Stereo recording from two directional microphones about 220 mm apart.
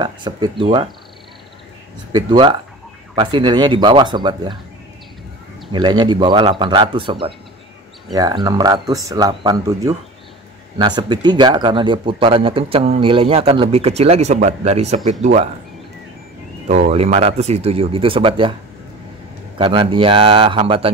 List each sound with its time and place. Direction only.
0.0 s speech: 20° right (ahead or behind)
2.1 s speech: 20° right (ahead or behind)
5.7 s speech: 20° right (ahead or behind)
16.6 s speech: 30° right (ahead or behind)
19.6 s speech: 25° right (ahead or behind)